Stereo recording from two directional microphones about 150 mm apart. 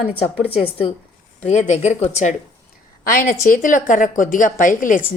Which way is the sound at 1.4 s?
50° left (ahead or behind).